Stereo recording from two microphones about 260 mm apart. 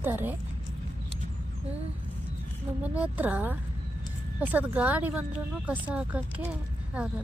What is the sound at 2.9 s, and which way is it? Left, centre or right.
A woman's voice, centre.